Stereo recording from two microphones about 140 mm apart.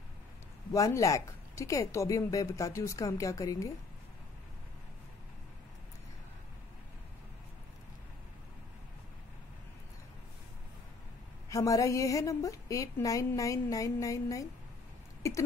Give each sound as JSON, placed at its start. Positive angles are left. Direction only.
{"t": 0.7, "sound": "a woman's voice", "side_deg": 25}
{"t": 11.4, "sound": "a woman's voice", "side_deg": 25}